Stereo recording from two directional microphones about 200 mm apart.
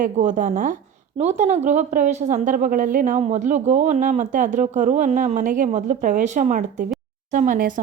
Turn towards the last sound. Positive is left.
turn(degrees=-40)  # may be behind; listen again after turning